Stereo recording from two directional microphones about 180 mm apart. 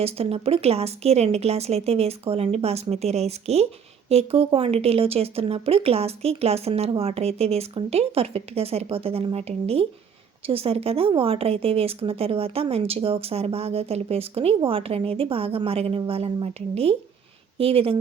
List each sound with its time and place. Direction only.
0.0 s speech: 35° right (ahead or behind)